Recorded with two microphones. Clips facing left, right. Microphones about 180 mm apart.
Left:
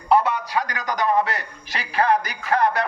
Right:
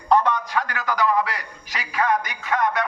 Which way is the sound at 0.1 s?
10° left (ahead or behind).